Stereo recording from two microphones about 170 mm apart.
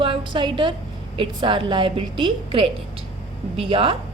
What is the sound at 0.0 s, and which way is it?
A woman's voice, 30° right (ahead or behind).